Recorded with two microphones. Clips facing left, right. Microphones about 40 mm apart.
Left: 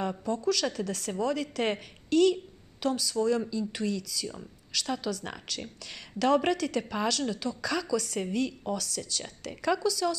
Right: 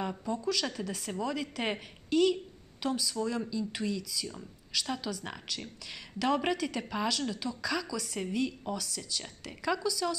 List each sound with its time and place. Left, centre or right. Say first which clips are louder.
0.2 s speech: left 5 dB; centre
9.6 s speech: left 4 dB; centre
9.8 s speech: left 4 dB; centre